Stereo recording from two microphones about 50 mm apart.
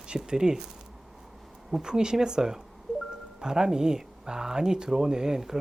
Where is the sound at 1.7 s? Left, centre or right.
Centre.